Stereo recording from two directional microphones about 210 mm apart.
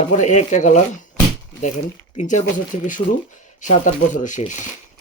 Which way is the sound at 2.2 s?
35° left (ahead or behind).